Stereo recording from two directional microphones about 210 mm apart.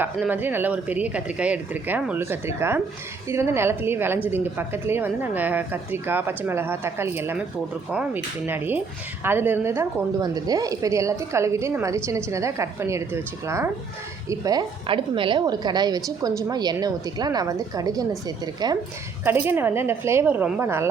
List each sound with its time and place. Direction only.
0.0 s a woman's voice: 10° right (ahead or behind)
14.3 s a woman's voice: 15° right (ahead or behind)